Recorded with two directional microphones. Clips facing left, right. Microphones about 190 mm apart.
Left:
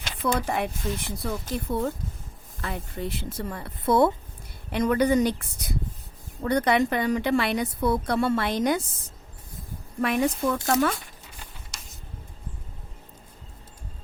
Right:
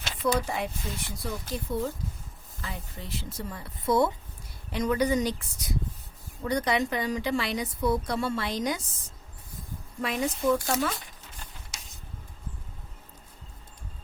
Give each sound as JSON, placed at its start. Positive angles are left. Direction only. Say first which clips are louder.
{"t": 0.2, "sound": "a woman's voice", "louder": "left 2 dB", "side_deg": 60}
{"t": 10.0, "sound": "a woman's voice", "louder": "left 5 dB", "side_deg": 60}